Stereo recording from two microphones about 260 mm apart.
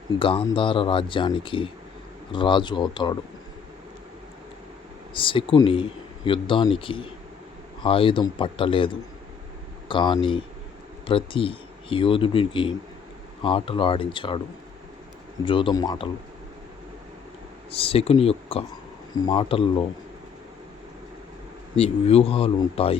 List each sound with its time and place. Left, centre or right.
0.2 s speech: centre
5.1 s speech: centre
9.9 s speech: centre
15.4 s speech: centre
17.7 s speech: left
21.8 s speech: left